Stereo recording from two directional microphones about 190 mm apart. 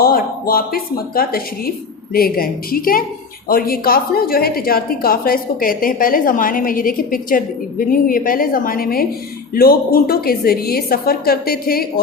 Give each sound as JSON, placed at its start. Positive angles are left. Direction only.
{"t": 0.0, "sound": "a woman's voice", "side_deg": 50}